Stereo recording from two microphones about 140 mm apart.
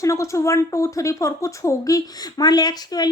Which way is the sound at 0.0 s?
20° left (ahead or behind).